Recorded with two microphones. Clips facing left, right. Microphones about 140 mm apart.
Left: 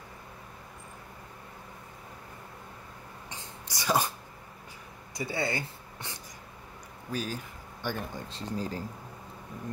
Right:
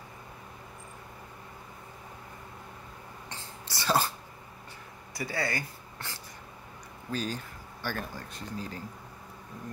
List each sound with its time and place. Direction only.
3.3 s sneeze: 15° left (ahead or behind)
5.1 s speech: 25° left (ahead or behind)
7.1 s speech: 10° left (ahead or behind); by 8.8 s 35° left (ahead or behind)